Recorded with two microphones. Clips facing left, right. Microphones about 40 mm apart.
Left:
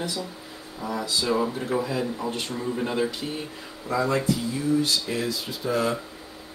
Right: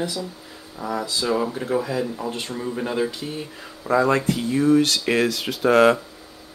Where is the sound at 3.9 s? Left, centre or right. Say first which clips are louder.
Right 5 dB; right.